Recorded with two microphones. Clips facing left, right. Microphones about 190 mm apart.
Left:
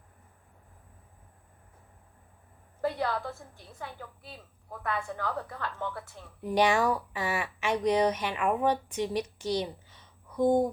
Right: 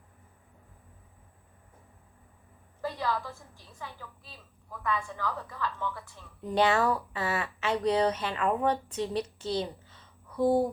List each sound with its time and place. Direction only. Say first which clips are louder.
2.8 s a woman's voice: left 2 dB; 60° left (ahead or behind)
6.4 s speech: even; 10° left (ahead or behind)
10.4 s speech: left 1 dB; 5° right (ahead or behind)